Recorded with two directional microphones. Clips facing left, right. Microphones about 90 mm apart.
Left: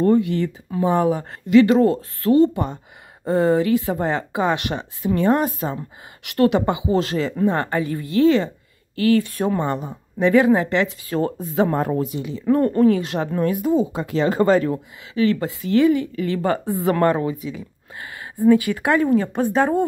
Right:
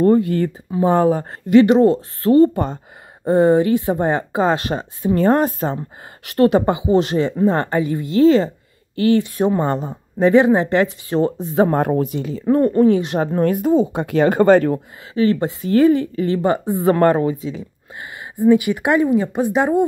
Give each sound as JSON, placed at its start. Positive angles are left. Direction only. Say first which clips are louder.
{"t": 0.0, "sound": "speech", "louder": "right 3 dB", "side_deg": -35}
{"t": 3.3, "sound": "speech", "louder": "right 4 dB", "side_deg": -30}
{"t": 6.2, "sound": "a woman's voice", "louder": "right 3 dB", "side_deg": -35}
{"t": 9.6, "sound": "a woman's voice", "louder": "right 3 dB", "side_deg": -35}
{"t": 11.7, "sound": "speech", "louder": "right 4 dB", "side_deg": -55}
{"t": 12.4, "sound": "a woman's voice", "louder": "right 2 dB", "side_deg": -20}
{"t": 13.4, "sound": "speech", "louder": "right 3 dB", "side_deg": -50}
{"t": 15.1, "sound": "speech", "louder": "right 3 dB", "side_deg": -30}
{"t": 16.3, "sound": "a woman's voice", "louder": "right 2 dB", "side_deg": -20}